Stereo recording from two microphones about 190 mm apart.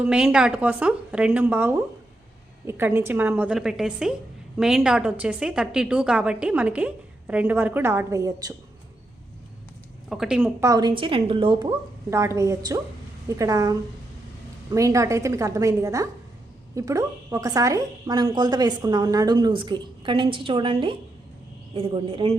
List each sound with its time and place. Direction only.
0.0 s a woman's voice: 5° right (ahead or behind)
10.1 s speech: centre (ahead or behind)
10.6 s a woman's voice: 20° right (ahead or behind)
12.1 s a woman's voice: 15° right (ahead or behind)